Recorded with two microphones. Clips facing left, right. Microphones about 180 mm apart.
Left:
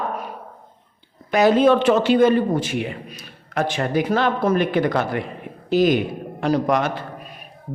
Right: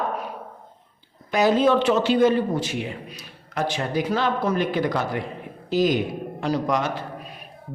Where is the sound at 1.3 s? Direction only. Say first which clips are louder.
Left 3 dB; 60° left (ahead or behind).